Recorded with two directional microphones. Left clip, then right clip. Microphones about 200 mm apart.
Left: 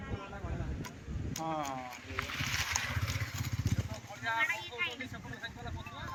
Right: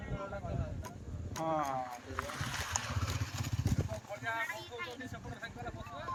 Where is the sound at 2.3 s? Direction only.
40° right (ahead or behind).